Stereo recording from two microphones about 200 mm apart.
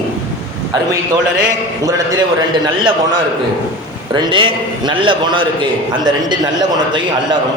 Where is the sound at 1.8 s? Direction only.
20° right (ahead or behind).